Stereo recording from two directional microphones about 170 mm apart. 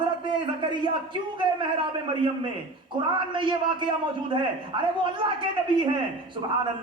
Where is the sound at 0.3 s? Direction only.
30° right (ahead or behind).